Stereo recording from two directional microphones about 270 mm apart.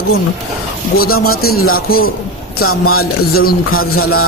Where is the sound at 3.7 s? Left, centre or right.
Left.